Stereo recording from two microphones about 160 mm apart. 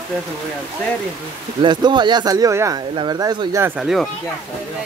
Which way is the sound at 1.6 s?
30° right (ahead or behind).